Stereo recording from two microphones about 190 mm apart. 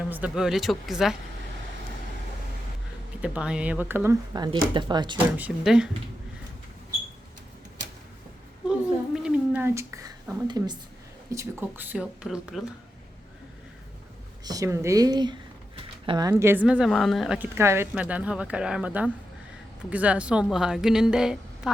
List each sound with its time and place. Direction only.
0.0 s speech: 5° right (ahead or behind)
3.2 s speech: 5° right (ahead or behind)
4.5 s speech: 25° right (ahead or behind)
5.4 s speech: 5° right (ahead or behind)
8.6 s a sound: 5° right (ahead or behind); by 10.8 s 25° right (ahead or behind)
11.3 s speech: 15° right (ahead or behind)
14.4 s speech: 20° right (ahead or behind)
16.3 s speech: 10° right (ahead or behind)